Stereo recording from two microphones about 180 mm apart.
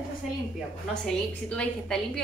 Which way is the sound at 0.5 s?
5° left (ahead or behind).